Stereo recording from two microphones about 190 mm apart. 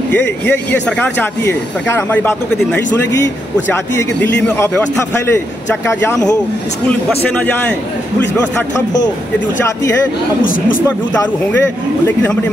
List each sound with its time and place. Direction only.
0.1 s speech: 10° left (ahead or behind)
9.6 s speech: 15° left (ahead or behind)